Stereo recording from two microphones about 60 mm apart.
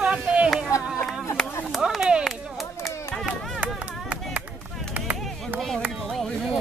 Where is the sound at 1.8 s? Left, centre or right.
Centre.